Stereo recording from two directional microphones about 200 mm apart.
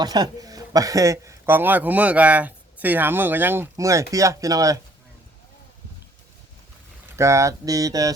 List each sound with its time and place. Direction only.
0.0 s speech: 20° right (ahead or behind)
7.2 s speech: 15° right (ahead or behind)